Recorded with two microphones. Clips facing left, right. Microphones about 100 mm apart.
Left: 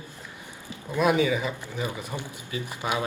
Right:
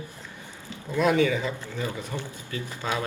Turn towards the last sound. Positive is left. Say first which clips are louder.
# left 1 dB
turn(degrees=15)  # may be behind; listen again after turning